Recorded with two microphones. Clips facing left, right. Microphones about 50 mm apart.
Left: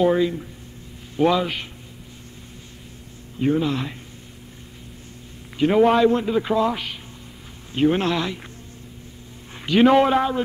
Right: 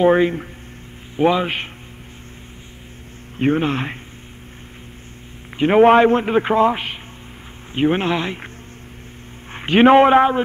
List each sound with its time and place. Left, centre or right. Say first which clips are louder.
0.0 s speech: right 4 dB; right
1.1 s a man's voice: right 2 dB; right
3.3 s speech: right 3 dB; right
5.6 s a man's voice: right 5 dB; right
9.5 s a man's voice: right 4 dB; right